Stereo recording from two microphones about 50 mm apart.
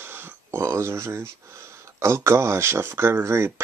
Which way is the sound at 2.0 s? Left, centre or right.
Right.